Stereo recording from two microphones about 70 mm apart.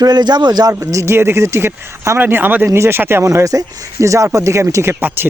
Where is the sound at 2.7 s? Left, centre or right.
Right.